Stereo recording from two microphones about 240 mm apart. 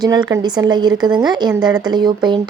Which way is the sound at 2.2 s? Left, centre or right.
Centre.